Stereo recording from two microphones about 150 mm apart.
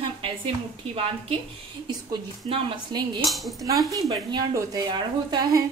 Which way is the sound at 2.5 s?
30° right (ahead or behind).